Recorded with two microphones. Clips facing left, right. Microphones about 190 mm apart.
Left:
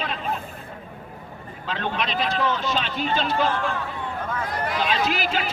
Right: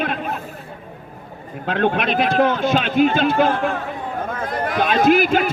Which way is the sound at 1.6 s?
55° right (ahead or behind).